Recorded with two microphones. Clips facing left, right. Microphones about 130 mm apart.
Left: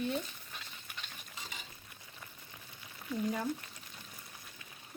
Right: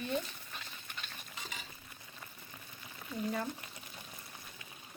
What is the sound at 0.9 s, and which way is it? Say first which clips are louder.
Stir: right 1 dB; 5° left (ahead or behind).